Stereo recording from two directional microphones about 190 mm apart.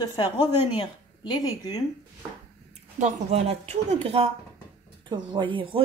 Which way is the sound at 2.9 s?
35° right (ahead or behind).